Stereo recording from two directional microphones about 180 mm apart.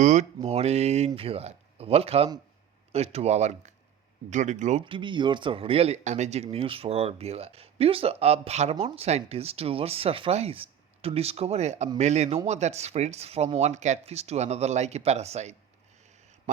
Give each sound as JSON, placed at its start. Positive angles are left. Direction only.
{"t": 0.0, "sound": "speech", "side_deg": -45}
{"t": 4.9, "sound": "speech", "side_deg": -25}